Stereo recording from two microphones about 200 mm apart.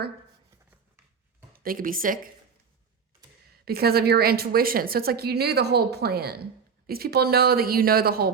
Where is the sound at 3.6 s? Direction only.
50° right (ahead or behind).